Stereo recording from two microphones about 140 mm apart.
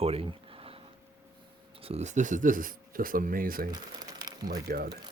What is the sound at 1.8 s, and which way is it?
Speech, 50° right (ahead or behind).